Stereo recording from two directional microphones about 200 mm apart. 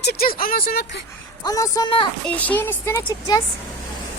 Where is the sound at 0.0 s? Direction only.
55° left (ahead or behind).